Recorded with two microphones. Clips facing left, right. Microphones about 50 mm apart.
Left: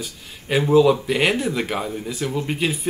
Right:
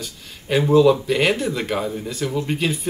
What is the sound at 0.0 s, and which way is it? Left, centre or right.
Speech, centre.